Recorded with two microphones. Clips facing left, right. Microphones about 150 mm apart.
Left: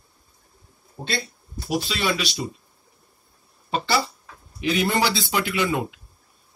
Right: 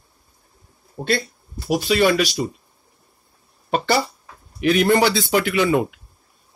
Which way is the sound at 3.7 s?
55° right (ahead or behind).